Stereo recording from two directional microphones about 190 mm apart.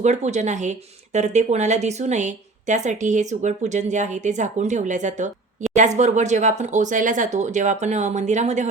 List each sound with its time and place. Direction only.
0.0 s speech: 35° right (ahead or behind)